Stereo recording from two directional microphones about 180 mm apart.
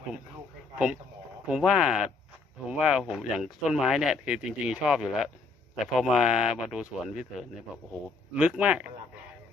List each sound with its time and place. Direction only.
1.5 s speech: 5° right (ahead or behind)